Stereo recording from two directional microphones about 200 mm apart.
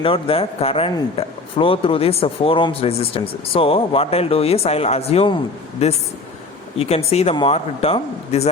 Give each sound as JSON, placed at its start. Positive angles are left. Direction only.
{"t": 0.0, "sound": "speech", "side_deg": 25}